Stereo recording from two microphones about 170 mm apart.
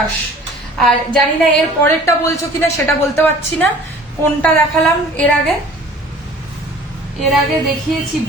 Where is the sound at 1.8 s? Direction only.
15° left (ahead or behind).